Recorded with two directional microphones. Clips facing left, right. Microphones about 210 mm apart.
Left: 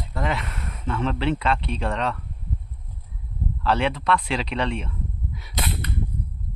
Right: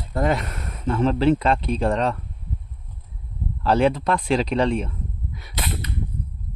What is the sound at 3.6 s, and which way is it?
Speech, 40° right (ahead or behind).